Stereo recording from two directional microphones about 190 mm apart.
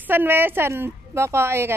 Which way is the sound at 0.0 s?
10° right (ahead or behind).